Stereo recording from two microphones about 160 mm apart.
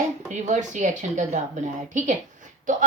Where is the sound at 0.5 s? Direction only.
50° right (ahead or behind).